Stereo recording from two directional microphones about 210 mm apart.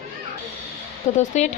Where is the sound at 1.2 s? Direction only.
35° left (ahead or behind).